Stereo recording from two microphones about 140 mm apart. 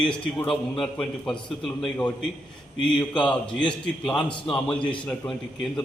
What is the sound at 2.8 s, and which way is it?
Speech, 35° left (ahead or behind).